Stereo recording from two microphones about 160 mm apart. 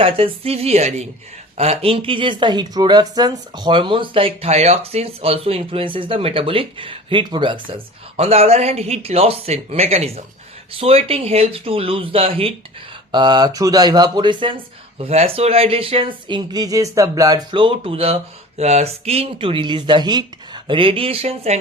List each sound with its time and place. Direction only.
0.0 s a woman's voice: 40° right (ahead or behind)